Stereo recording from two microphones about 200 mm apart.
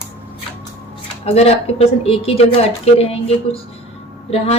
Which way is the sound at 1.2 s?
30° left (ahead or behind).